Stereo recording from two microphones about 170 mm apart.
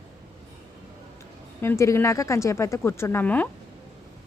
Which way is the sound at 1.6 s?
15° left (ahead or behind).